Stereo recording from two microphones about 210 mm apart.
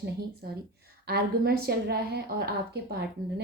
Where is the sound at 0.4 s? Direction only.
50° right (ahead or behind).